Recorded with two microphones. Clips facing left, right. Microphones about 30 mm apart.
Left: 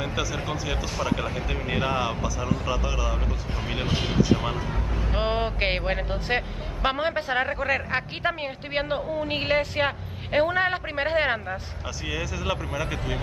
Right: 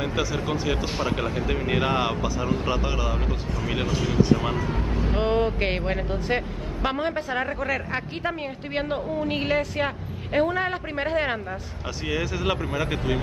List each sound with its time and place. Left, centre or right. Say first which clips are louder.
0.7 s speech: right 2 dB; right
1.1 s speech: right 2 dB; centre
1.9 s speech: right 1 dB; centre
2.2 s speech: right 2 dB; right
3.8 s speech: left 1 dB; left
4.4 s speech: right 3 dB; centre
5.1 s speech: right 3 dB; left
7.4 s speech: left 1 dB; centre
7.9 s speech: left 2 dB; left
12.1 s speech: right 3 dB; centre